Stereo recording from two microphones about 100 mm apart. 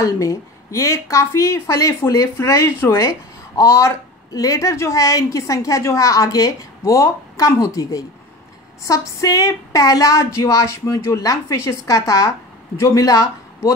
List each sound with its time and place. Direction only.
0.0 s a woman's voice: 30° left (ahead or behind)